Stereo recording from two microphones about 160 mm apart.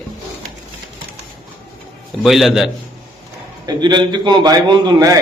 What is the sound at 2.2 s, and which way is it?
Speech, centre (ahead or behind).